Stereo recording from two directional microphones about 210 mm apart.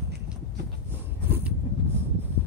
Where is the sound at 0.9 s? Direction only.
10° right (ahead or behind).